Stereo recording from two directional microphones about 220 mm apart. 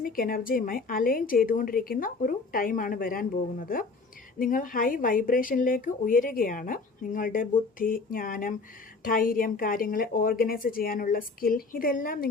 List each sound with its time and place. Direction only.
0.0 s a woman's voice: 40° left (ahead or behind)